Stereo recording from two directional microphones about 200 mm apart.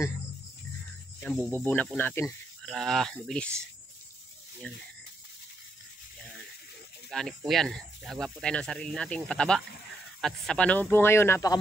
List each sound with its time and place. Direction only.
1.2 s speech: 10° left (ahead or behind)
4.7 s speech: 5° left (ahead or behind)
7.1 s speech: centre (ahead or behind)